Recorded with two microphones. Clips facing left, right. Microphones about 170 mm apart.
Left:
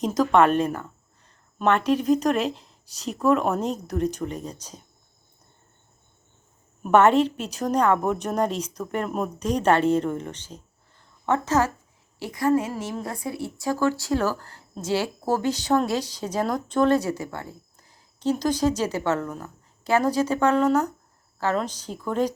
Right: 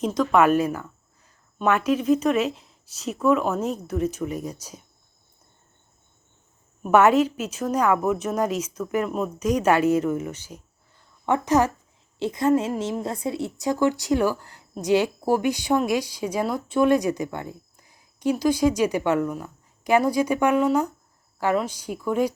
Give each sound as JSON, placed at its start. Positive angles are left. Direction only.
{"t": 0.0, "sound": "a woman's voice", "side_deg": 0}
{"t": 6.9, "sound": "a woman's voice", "side_deg": -5}